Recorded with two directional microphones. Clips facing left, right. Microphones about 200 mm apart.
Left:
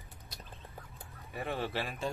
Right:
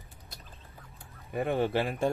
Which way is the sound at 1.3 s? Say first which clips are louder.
Right 8 dB; 50° right (ahead or behind).